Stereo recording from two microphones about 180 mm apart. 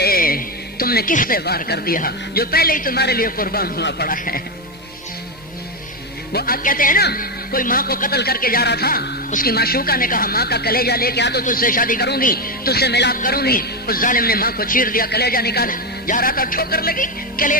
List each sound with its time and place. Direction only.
0.0 s speech: 55° left (ahead or behind)
6.3 s a man's voice: 55° left (ahead or behind)
11.4 s a man's voice: 50° left (ahead or behind)
13.1 s a man's voice: 55° left (ahead or behind)